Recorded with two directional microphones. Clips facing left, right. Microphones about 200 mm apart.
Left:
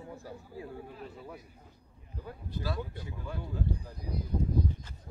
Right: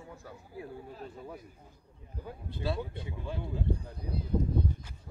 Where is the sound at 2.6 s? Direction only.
25° right (ahead or behind).